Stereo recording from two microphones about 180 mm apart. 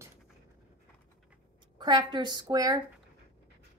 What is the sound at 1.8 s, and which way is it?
A woman's voice, 25° right (ahead or behind).